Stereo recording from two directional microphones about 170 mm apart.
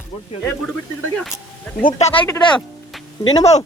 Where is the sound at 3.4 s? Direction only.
40° left (ahead or behind).